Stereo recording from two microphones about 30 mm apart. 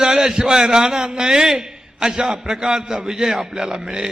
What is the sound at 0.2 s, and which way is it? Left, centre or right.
A man's voice, centre.